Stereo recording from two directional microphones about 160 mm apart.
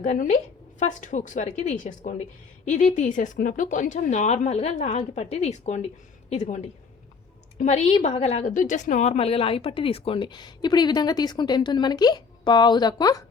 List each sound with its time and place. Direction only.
0.0 s a woman's voice: 50° left (ahead or behind)
7.6 s a woman's voice: 45° left (ahead or behind); by 13.2 s 25° left (ahead or behind)